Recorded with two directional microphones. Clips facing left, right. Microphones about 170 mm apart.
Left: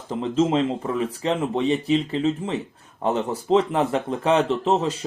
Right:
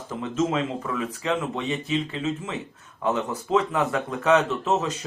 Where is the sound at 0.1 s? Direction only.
30° left (ahead or behind).